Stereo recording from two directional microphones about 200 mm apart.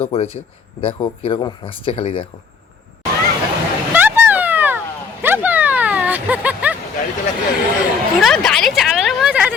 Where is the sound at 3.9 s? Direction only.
10° right (ahead or behind).